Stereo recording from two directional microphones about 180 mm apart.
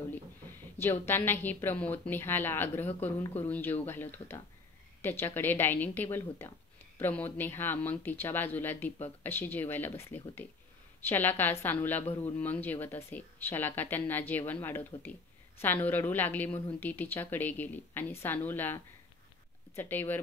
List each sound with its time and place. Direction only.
1.0 s speech: 10° left (ahead or behind)